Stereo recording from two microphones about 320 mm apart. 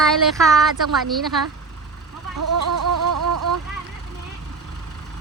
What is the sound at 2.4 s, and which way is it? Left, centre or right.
Vehicle, right.